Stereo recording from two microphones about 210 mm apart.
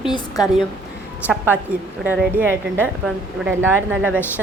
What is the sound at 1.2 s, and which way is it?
Speech, 5° right (ahead or behind).